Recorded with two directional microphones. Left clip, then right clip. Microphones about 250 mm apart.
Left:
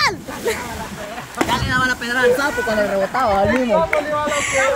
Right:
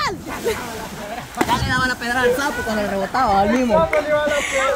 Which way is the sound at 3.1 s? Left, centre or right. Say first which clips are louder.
Even; right.